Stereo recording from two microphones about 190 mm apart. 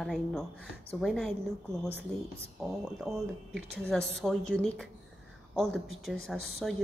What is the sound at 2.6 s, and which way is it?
Speech, centre (ahead or behind).